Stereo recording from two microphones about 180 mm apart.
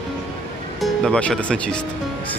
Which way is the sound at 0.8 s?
5° left (ahead or behind).